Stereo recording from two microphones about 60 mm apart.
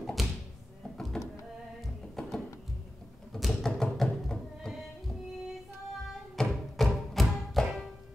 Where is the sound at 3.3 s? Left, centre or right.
Centre.